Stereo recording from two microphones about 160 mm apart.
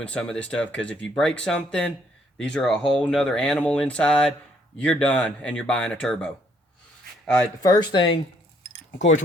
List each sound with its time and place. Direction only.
0.0 s speech: 5° left (ahead or behind)
7.6 s speech: 25° left (ahead or behind)